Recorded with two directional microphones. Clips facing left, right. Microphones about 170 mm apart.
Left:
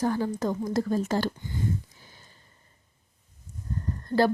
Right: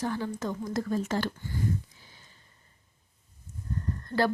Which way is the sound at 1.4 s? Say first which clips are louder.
Left 1 dB; 20° left (ahead or behind).